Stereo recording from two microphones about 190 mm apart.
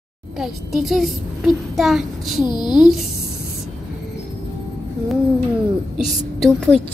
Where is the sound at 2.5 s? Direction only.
20° left (ahead or behind).